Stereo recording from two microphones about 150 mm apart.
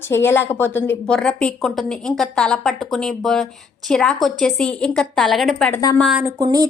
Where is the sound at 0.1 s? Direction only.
15° left (ahead or behind).